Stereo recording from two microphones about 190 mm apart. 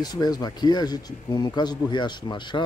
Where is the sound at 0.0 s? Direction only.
20° left (ahead or behind).